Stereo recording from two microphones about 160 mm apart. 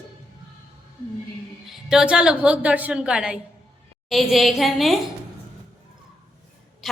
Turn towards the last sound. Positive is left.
turn(degrees=0)  # may be behind; listen again after turning